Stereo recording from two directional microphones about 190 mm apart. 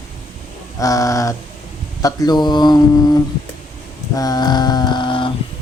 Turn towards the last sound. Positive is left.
turn(degrees=25)  # may be behind; listen again after turning